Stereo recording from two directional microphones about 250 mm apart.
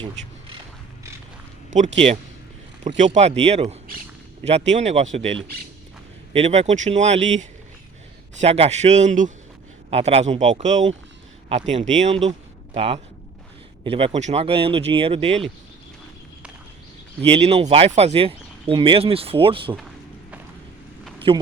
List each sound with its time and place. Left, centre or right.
2.8 s speech: right
17.2 s speech: right
21.3 s speech: centre